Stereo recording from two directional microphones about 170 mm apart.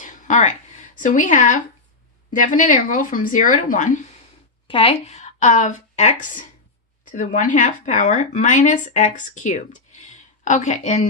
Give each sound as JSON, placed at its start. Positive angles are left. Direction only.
{"t": 0.0, "sound": "a sound", "side_deg": 50}
{"t": 2.3, "sound": "speech", "side_deg": 50}
{"t": 4.7, "sound": "speech", "side_deg": 35}